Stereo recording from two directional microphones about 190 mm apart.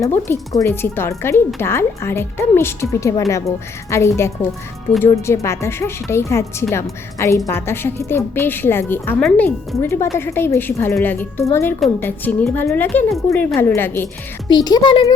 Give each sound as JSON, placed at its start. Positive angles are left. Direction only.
{"t": 0.0, "sound": "a child's voice", "side_deg": 15}